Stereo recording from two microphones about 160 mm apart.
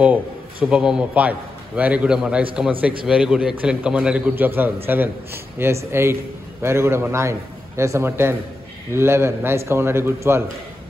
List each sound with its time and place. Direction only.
0.0 s a man's voice: 10° right (ahead or behind)